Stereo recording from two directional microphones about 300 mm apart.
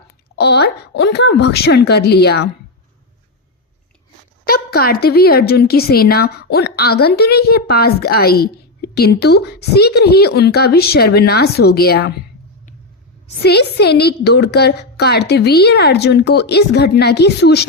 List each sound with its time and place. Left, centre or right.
0.3 s speech: left
4.4 s speech: left
13.4 s speech: left